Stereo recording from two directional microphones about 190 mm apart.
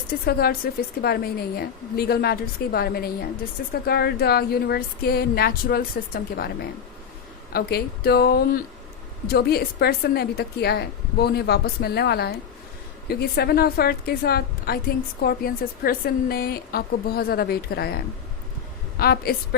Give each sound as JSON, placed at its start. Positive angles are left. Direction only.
{"t": 0.1, "sound": "a woman's voice", "side_deg": 55}